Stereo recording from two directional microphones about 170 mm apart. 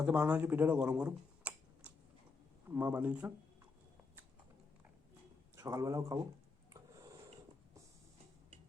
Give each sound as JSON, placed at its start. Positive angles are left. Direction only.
{"t": 0.0, "sound": "speech", "side_deg": -5}
{"t": 5.5, "sound": "speech", "side_deg": -20}